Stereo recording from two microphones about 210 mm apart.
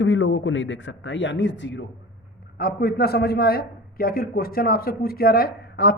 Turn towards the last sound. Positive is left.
turn(degrees=50)  # may be behind; listen again after turning